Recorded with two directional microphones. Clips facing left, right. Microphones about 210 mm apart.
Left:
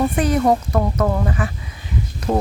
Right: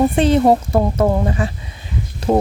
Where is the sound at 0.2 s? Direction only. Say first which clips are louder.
Right 3 dB; 25° right (ahead or behind).